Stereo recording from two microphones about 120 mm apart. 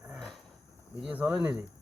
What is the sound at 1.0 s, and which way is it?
Speech, 10° right (ahead or behind).